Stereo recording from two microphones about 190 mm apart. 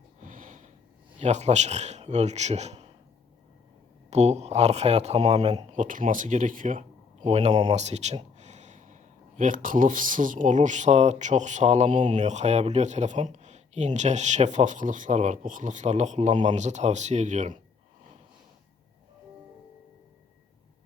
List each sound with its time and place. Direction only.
0.2 s a sound: 45° right (ahead or behind)
1.2 s speech: 35° right (ahead or behind)
4.1 s speech: 35° right (ahead or behind)